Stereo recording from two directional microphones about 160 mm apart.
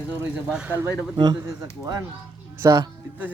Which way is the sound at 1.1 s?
25° right (ahead or behind).